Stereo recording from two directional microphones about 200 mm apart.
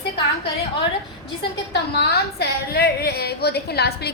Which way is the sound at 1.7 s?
55° left (ahead or behind).